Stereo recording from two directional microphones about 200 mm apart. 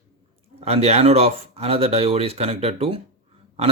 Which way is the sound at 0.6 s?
30° right (ahead or behind).